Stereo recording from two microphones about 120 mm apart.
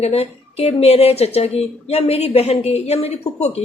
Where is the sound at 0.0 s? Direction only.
60° left (ahead or behind).